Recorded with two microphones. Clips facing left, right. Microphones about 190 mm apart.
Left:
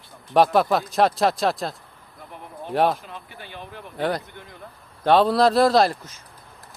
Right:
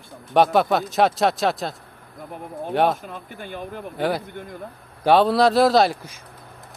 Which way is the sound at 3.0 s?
50° right (ahead or behind).